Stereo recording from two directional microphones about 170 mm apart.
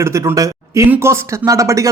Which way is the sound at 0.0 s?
15° right (ahead or behind).